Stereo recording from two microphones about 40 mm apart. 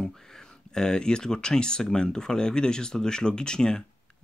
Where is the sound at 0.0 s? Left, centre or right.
Centre.